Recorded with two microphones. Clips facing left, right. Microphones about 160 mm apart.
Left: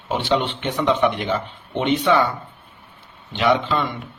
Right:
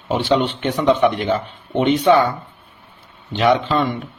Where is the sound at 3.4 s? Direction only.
35° right (ahead or behind).